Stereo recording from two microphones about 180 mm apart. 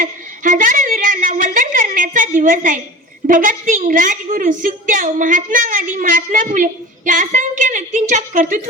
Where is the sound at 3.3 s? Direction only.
45° right (ahead or behind).